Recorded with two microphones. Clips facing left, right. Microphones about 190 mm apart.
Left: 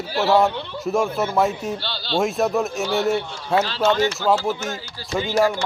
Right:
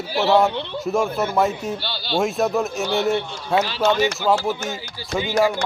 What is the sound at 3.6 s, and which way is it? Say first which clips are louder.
Speech: even; 15° right (ahead or behind).